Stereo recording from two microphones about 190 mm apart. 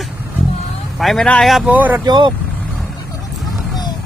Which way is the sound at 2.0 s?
20° right (ahead or behind).